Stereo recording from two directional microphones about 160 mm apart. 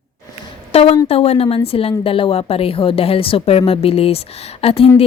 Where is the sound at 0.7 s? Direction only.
35° left (ahead or behind).